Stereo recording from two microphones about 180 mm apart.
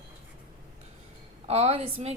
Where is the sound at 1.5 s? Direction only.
35° right (ahead or behind).